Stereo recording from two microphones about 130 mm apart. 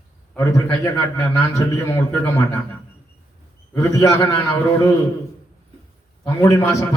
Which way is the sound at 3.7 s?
25° left (ahead or behind).